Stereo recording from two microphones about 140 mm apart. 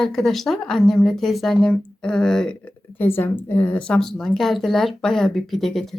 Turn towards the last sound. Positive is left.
turn(degrees=0)  # may be behind; listen again after turning